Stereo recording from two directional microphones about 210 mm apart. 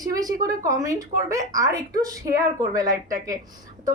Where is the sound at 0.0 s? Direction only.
15° right (ahead or behind).